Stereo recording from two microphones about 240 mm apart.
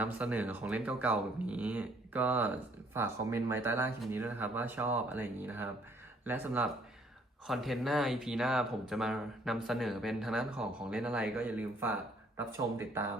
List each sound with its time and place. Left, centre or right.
0.0 s speech: centre